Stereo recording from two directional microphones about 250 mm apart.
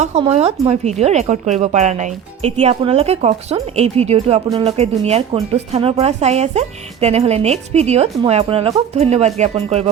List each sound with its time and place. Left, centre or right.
0.0 s speech: right
4.8 s speech: right